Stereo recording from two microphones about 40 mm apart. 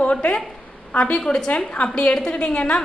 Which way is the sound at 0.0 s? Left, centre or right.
Left.